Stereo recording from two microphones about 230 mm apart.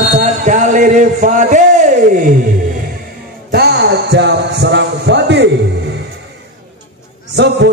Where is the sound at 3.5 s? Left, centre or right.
Right.